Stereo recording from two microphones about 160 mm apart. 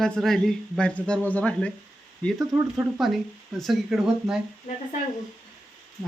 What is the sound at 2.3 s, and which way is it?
Speech, 15° right (ahead or behind).